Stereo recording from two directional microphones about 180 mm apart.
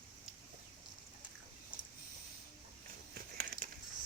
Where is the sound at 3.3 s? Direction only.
55° right (ahead or behind).